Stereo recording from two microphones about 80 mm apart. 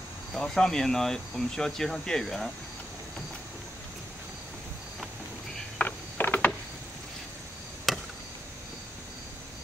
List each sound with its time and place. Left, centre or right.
0.3 s speech: centre
5.8 s a sound: left
7.9 s chop: centre